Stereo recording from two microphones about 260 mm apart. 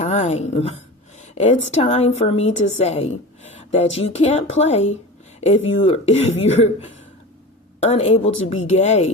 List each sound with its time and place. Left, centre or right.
0.0 s a sound: left
1.6 s a woman's voice: left
7.8 s speech: left